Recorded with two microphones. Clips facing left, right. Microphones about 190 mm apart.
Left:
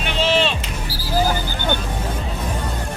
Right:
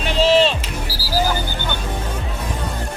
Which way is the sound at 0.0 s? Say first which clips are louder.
Right 4 dB; 35° right (ahead or behind).